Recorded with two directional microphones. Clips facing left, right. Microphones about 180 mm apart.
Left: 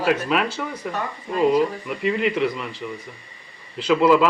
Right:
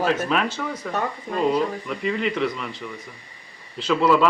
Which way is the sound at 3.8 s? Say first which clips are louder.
Left 2 dB; 5° left (ahead or behind).